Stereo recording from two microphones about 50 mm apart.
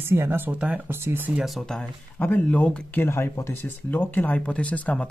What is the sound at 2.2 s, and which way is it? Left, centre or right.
Speech, left.